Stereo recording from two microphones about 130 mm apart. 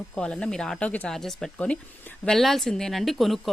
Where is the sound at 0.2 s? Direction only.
5° left (ahead or behind).